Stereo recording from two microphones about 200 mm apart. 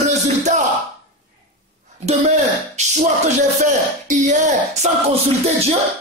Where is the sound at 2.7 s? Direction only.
35° right (ahead or behind).